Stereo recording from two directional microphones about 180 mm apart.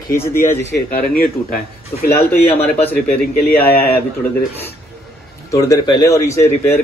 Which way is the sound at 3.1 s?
55° left (ahead or behind).